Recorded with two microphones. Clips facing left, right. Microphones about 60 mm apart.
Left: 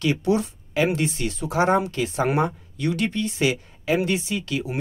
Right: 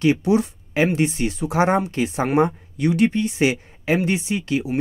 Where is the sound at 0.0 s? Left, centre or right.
Right.